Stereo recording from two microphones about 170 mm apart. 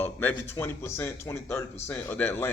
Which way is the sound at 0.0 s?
10° left (ahead or behind).